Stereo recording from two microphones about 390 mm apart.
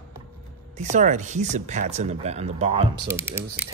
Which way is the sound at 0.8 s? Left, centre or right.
Centre.